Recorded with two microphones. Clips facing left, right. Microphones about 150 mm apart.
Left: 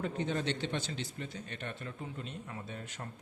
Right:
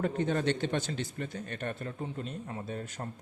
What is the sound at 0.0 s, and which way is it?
A man's voice, 50° right (ahead or behind).